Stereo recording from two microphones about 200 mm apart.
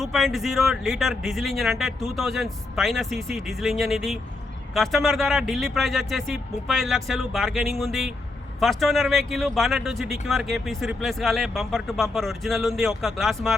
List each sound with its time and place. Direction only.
0.0 s a man's voice: centre (ahead or behind)